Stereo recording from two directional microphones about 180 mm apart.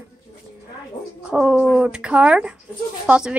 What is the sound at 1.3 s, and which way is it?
Speech, 5° right (ahead or behind).